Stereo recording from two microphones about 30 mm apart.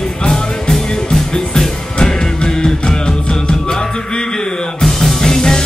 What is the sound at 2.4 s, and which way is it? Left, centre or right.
Music, left.